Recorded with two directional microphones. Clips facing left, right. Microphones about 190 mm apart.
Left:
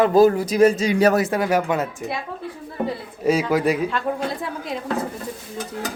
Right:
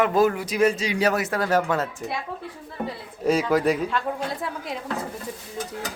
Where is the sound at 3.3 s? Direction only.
5° left (ahead or behind).